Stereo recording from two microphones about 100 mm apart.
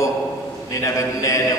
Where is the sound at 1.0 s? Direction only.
30° left (ahead or behind).